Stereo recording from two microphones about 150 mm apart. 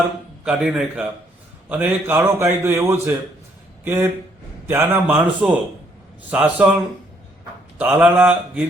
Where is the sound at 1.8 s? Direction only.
15° right (ahead or behind).